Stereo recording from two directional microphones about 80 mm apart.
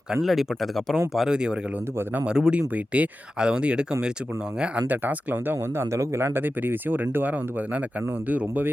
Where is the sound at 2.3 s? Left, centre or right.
Centre.